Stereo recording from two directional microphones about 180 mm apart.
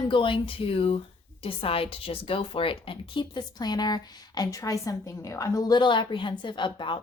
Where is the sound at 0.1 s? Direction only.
30° left (ahead or behind).